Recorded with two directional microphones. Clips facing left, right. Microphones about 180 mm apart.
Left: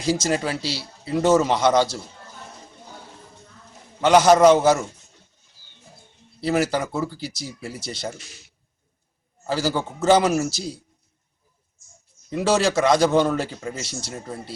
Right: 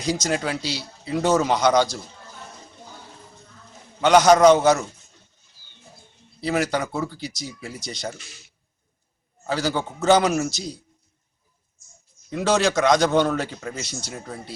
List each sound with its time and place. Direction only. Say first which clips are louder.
0.0 s a man's voice: left 2 dB; 5° left (ahead or behind)
4.0 s a man's voice: even; 5° left (ahead or behind)
6.4 s a man's voice: left 2 dB; 5° left (ahead or behind)
9.5 s a man's voice: left 1 dB; 5° left (ahead or behind)
12.3 s a man's voice: left 1 dB; 5° left (ahead or behind)